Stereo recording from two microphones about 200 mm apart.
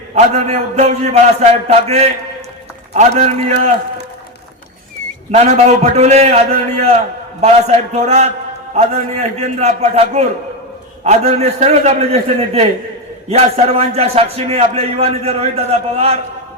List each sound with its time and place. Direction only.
0.1 s a man's voice: 35° right (ahead or behind)
5.3 s a man's voice: 35° right (ahead or behind)